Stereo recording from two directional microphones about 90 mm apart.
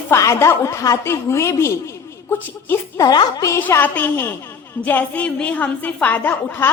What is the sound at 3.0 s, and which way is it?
Speech, 45° left (ahead or behind).